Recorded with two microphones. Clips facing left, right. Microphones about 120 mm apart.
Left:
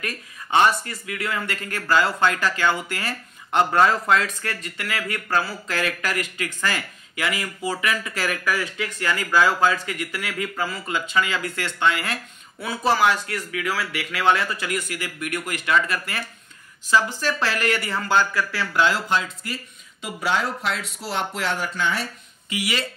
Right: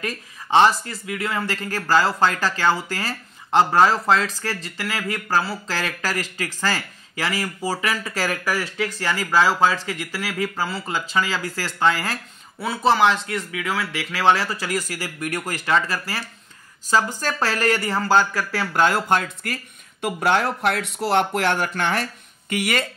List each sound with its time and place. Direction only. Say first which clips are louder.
0.0 s speech: right 3 dB; 25° right (ahead or behind); by 22.8 s 50° right (ahead or behind)